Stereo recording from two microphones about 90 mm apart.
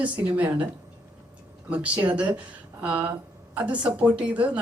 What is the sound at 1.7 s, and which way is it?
Speech, 15° right (ahead or behind).